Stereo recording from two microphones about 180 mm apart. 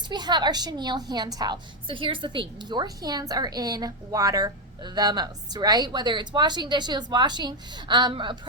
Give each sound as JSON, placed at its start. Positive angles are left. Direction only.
{"t": 0.1, "sound": "a woman's voice", "side_deg": -25}